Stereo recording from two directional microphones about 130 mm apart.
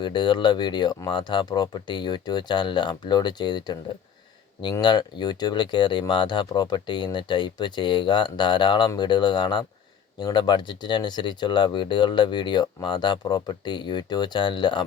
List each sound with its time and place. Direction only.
0.0 s speech: 35° left (ahead or behind)